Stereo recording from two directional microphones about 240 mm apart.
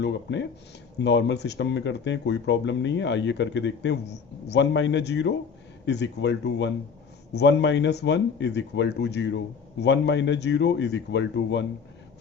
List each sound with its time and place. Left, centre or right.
0.0 s speech: left